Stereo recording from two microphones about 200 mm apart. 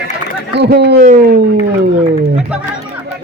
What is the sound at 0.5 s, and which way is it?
Speech, 55° right (ahead or behind).